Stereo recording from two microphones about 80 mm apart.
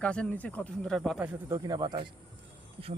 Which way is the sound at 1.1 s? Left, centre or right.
Centre.